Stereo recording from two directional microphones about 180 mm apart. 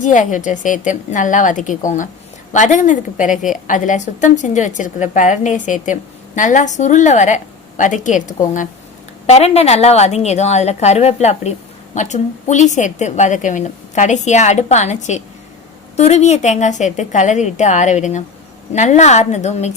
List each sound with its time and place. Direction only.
0.0 s a woman's voice: 45° left (ahead or behind)